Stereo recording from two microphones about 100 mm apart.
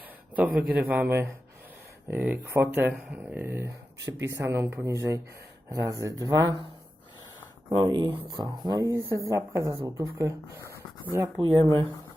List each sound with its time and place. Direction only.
0.3 s speech: 15° right (ahead or behind); by 6.6 s 35° right (ahead or behind)
7.7 s speech: 45° right (ahead or behind); by 10.8 s 30° right (ahead or behind)
11.3 s speech: 60° right (ahead or behind)